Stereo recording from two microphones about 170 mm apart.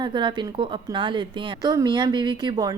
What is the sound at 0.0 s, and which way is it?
A woman's voice, 25° right (ahead or behind).